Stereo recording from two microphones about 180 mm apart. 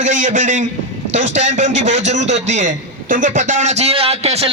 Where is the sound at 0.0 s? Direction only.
45° right (ahead or behind).